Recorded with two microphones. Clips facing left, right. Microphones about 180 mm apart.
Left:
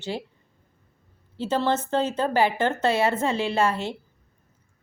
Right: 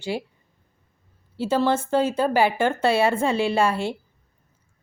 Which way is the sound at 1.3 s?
10° right (ahead or behind).